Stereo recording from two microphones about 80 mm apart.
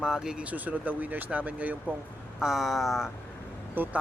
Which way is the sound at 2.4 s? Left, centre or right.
Centre.